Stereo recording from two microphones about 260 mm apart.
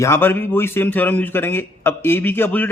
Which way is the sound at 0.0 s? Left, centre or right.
Centre.